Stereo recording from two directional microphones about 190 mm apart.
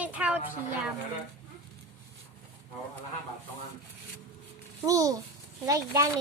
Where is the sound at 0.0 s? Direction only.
5° right (ahead or behind).